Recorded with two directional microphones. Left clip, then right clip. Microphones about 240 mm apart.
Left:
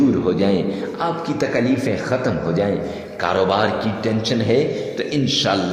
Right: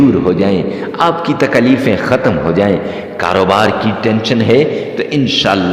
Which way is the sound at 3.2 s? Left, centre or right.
Right.